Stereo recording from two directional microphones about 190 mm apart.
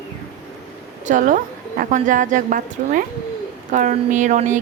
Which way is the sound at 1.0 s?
45° right (ahead or behind).